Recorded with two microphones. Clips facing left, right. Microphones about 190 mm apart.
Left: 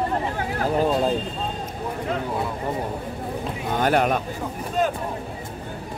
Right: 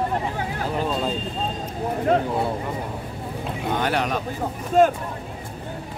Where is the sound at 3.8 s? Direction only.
50° left (ahead or behind).